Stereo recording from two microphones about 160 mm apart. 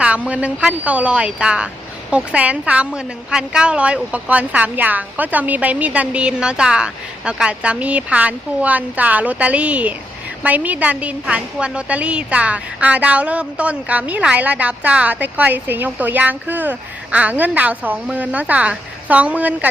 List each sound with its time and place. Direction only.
0.0 s speech: 5° right (ahead or behind)